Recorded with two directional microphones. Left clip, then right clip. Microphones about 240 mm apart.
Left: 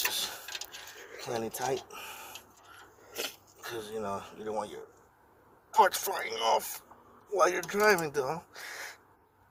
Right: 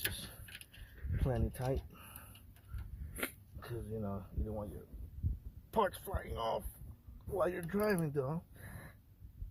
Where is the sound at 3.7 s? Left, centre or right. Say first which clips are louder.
Left 8 dB; right.